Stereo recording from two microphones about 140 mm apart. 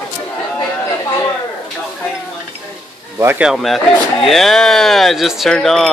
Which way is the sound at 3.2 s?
15° right (ahead or behind).